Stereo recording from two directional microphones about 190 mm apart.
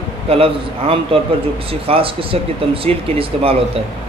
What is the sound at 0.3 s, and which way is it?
Speech, 30° right (ahead or behind).